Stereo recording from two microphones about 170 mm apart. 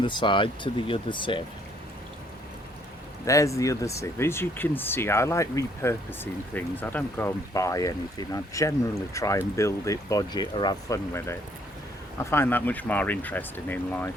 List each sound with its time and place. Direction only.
0.0 s speech: 30° left (ahead or behind)
3.2 s speech: 20° left (ahead or behind)